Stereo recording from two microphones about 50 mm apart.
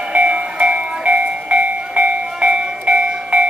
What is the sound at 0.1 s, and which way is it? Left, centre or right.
Train, right.